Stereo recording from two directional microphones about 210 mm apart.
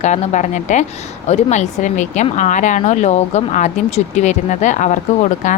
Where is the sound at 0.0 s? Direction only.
35° left (ahead or behind).